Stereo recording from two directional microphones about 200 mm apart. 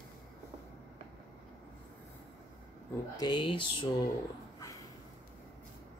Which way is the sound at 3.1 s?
20° left (ahead or behind).